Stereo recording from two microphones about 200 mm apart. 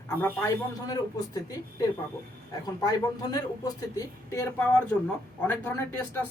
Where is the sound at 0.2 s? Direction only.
10° left (ahead or behind).